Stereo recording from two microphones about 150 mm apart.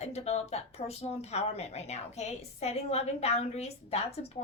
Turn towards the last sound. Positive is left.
turn(degrees=45)  # may be behind; listen again after turning